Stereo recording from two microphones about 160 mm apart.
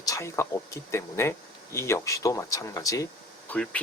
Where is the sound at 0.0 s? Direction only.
20° left (ahead or behind).